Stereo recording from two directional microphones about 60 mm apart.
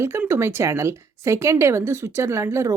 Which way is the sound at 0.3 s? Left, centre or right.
Right.